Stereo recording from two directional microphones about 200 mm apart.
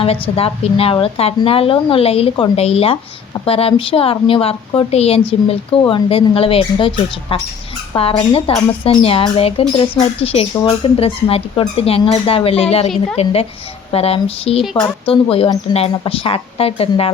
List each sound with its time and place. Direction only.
0.0 s speech: 30° left (ahead or behind)